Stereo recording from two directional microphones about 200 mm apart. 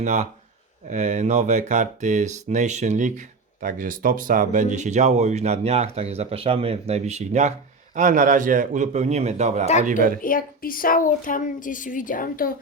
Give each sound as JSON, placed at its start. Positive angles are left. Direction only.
{"t": 0.0, "sound": "speech", "side_deg": -35}
{"t": 10.2, "sound": "speech", "side_deg": 45}